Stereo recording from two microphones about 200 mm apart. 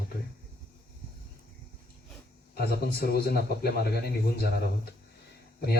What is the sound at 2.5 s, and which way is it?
A man's voice, 50° left (ahead or behind).